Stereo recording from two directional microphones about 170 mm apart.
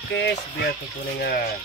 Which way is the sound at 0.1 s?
90° left.